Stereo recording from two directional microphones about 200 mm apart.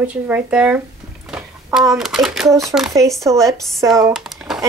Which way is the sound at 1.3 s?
5° right (ahead or behind).